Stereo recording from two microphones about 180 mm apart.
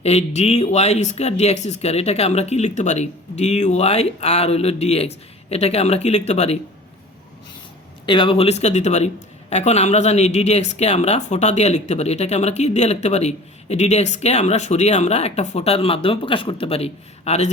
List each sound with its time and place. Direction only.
0.0 s speech: 35° left (ahead or behind)
8.0 s speech: 25° left (ahead or behind)